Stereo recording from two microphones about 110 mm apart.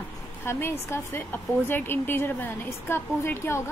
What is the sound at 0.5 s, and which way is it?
A woman's voice, 20° left (ahead or behind).